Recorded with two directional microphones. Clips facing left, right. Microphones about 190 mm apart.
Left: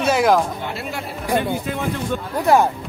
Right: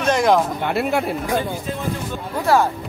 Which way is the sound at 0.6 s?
60° right (ahead or behind).